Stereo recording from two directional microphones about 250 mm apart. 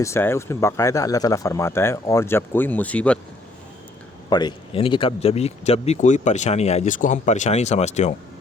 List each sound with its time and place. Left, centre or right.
0.0 s speech: centre
4.3 s speech: centre